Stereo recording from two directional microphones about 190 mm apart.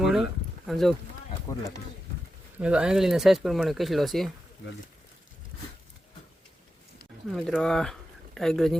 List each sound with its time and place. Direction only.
0.0 s a sound: centre (ahead or behind)
0.7 s speech: centre (ahead or behind)
1.5 s speech: 15° left (ahead or behind)
2.6 s speech: 5° right (ahead or behind)
7.3 s speech: centre (ahead or behind)